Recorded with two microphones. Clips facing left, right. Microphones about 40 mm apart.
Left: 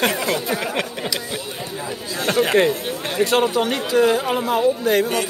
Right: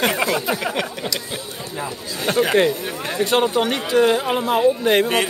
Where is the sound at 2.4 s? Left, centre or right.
Centre.